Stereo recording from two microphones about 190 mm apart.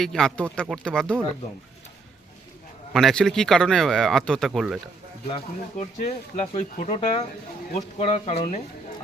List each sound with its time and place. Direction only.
0.0 s speech: centre (ahead or behind)
2.9 s speech: centre (ahead or behind)
5.3 s speech: 35° left (ahead or behind)